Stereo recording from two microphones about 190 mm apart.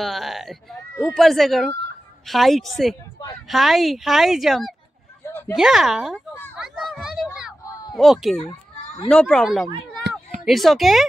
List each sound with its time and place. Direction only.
0.0 s speech: centre (ahead or behind)
6.5 s children playing: centre (ahead or behind)
7.6 s a sound: 15° left (ahead or behind)
7.9 s speech: centre (ahead or behind)